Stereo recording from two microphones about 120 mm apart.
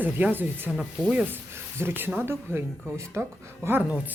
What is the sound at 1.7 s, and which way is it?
Speech, 20° right (ahead or behind).